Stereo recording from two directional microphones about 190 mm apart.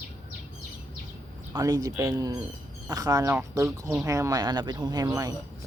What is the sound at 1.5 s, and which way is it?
Speech, 20° right (ahead or behind).